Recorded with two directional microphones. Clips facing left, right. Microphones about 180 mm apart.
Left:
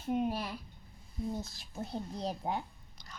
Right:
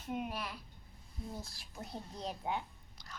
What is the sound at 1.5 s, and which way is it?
A woman's voice, 30° left (ahead or behind).